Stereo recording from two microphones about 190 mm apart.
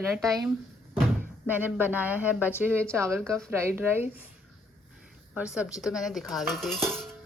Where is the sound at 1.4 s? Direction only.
10° right (ahead or behind).